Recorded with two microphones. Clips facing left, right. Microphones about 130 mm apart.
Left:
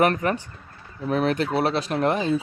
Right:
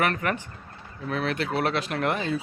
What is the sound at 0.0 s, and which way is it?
Speech, 35° left (ahead or behind).